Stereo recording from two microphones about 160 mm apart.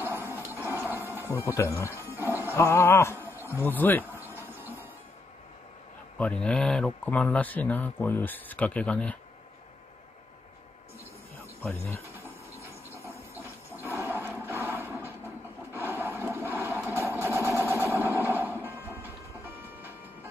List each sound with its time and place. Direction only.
0.0 s a sound: 15° right (ahead or behind)
1.1 s speech: 15° left (ahead or behind)
2.5 s music: 15° left (ahead or behind)
3.4 s speech: 15° left (ahead or behind)
4.1 s a sound: 15° right (ahead or behind)
4.5 s music: 15° right (ahead or behind)
6.1 s speech: 10° left (ahead or behind)
11.3 s a sound: 15° left (ahead or behind)
12.5 s train: 15° left (ahead or behind)
13.4 s a sound: 15° right (ahead or behind)
16.6 s sewing machine: 15° right (ahead or behind)
18.6 s music: 15° right (ahead or behind)